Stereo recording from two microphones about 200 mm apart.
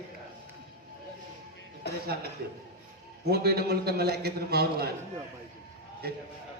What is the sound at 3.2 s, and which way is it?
Speech, 55° right (ahead or behind).